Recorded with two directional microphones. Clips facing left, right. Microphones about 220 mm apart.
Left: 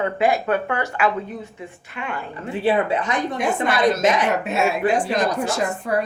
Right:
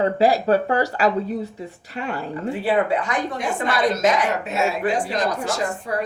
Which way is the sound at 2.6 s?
20° left (ahead or behind).